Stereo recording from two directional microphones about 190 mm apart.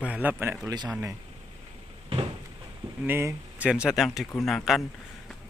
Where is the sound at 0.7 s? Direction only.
20° right (ahead or behind).